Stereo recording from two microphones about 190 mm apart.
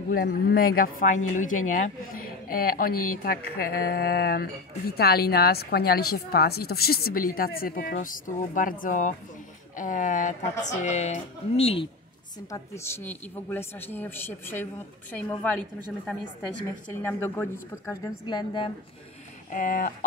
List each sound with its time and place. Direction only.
0.1 s speech: 50° left (ahead or behind); by 11.9 s 30° left (ahead or behind)
12.4 s speech: 15° left (ahead or behind)
17.0 s speech: 15° left (ahead or behind)
19.5 s speech: 45° left (ahead or behind)